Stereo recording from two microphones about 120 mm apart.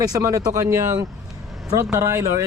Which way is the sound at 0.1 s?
25° right (ahead or behind).